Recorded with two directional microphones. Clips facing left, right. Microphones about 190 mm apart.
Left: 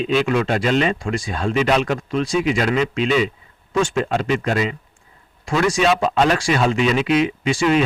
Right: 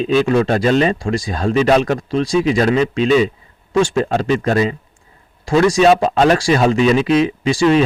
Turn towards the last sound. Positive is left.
turn(degrees=-35)  # may be behind; listen again after turning